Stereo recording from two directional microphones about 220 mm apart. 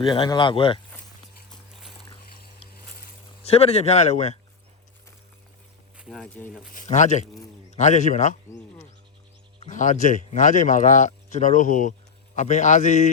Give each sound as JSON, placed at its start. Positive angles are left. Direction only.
{"t": 0.0, "sound": "speech", "side_deg": 20}
{"t": 3.4, "sound": "speech", "side_deg": 30}
{"t": 6.0, "sound": "speech", "side_deg": 0}
{"t": 6.7, "sound": "a man's voice", "side_deg": 35}
{"t": 9.6, "sound": "speech", "side_deg": 35}